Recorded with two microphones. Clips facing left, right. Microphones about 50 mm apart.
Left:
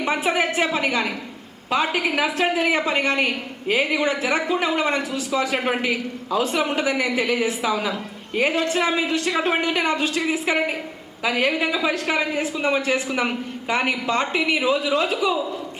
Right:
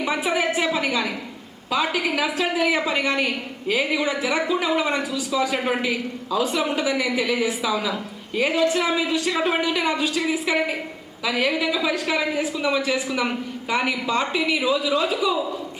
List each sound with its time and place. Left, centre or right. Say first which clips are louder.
0.0 s a woman's voice: left 1 dB; left